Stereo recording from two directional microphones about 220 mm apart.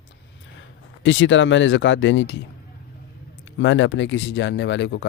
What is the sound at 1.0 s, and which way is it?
Speech, 60° left (ahead or behind).